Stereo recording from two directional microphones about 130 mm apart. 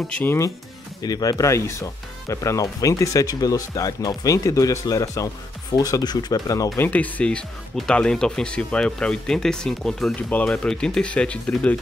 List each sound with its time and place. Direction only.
0.1 s speech: 15° left (ahead or behind)
1.0 s speech: 30° left (ahead or behind)
6.9 s speech: 10° left (ahead or behind)